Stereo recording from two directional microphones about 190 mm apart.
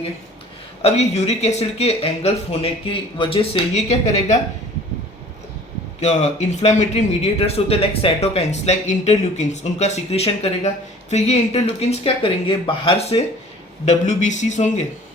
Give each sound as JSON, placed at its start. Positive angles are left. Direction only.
{"t": 0.8, "sound": "a man's voice", "side_deg": 35}
{"t": 6.0, "sound": "a man's voice", "side_deg": 35}